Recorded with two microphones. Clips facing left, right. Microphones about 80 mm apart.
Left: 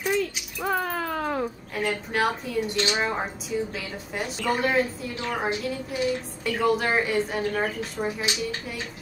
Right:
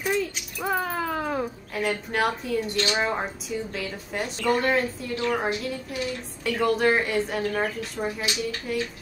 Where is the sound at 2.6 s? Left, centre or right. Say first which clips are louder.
Left 4 dB; left.